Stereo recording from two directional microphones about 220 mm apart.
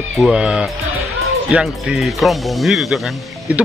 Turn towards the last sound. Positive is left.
turn(degrees=0)  # may be behind; listen again after turning